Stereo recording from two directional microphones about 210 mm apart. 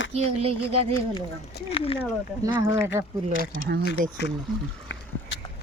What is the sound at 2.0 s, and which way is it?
Speech, 10° right (ahead or behind).